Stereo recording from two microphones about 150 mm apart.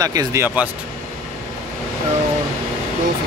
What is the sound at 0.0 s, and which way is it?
Speech, 25° right (ahead or behind).